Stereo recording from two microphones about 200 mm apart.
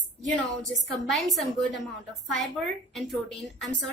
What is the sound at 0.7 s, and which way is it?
A woman's voice, centre (ahead or behind).